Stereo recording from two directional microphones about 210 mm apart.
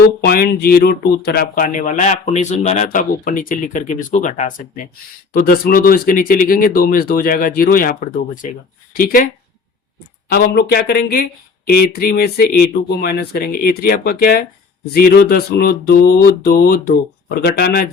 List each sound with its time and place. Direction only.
0.3 s speech: 45° left (ahead or behind)
10.2 s speech: 45° left (ahead or behind)